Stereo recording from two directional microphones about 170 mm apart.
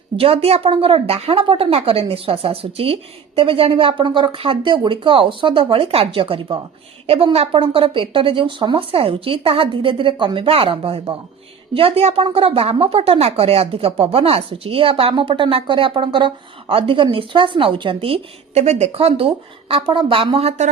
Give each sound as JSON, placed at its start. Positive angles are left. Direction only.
{"t": 0.2, "sound": "a woman's voice", "side_deg": -35}